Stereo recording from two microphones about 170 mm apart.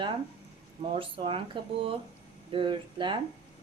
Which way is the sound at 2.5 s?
30° right (ahead or behind).